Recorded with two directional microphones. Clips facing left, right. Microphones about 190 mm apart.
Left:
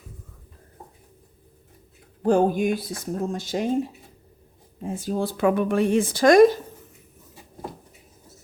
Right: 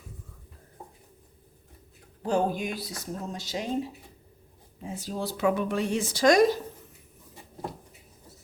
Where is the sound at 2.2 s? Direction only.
50° left (ahead or behind).